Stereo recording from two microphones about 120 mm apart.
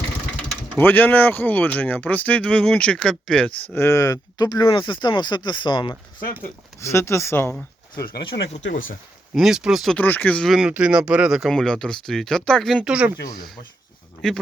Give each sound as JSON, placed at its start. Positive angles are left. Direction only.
{"t": 0.8, "sound": "speech", "side_deg": 15}
{"t": 3.8, "sound": "speech", "side_deg": 25}
{"t": 6.7, "sound": "speech", "side_deg": 20}
{"t": 9.3, "sound": "speech", "side_deg": -5}
{"t": 10.0, "sound": "speech", "side_deg": 15}
{"t": 10.5, "sound": "speech", "side_deg": -5}
{"t": 14.2, "sound": "speech", "side_deg": 5}